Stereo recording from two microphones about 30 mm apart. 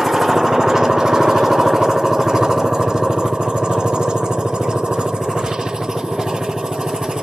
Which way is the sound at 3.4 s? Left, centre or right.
Right.